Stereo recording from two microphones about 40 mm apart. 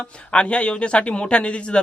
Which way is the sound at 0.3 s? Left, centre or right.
Left.